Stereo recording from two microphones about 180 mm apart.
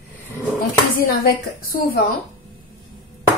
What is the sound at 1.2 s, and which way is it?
Speech, 55° left (ahead or behind).